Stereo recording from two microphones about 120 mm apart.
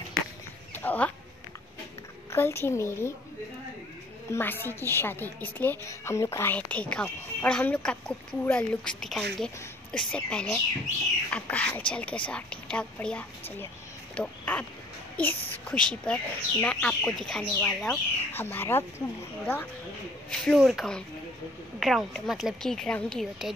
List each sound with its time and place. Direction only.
0.7 s a sound: 15° left (ahead or behind)
2.3 s a child's voice: 20° left (ahead or behind)
4.3 s a woman's voice: 20° left (ahead or behind)
18.3 s a woman's voice: 20° left (ahead or behind)
20.2 s speech: centre (ahead or behind)